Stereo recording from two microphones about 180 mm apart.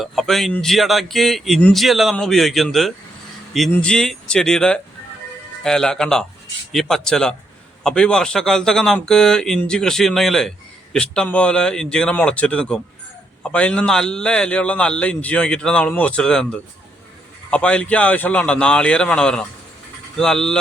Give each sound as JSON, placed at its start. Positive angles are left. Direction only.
{"t": 0.0, "sound": "a man's voice", "side_deg": 0}